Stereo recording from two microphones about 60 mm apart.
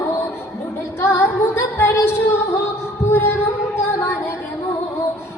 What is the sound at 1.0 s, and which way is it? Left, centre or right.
Music, left.